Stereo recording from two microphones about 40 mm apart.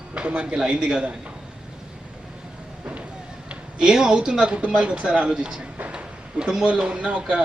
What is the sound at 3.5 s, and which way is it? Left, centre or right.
Speech, right.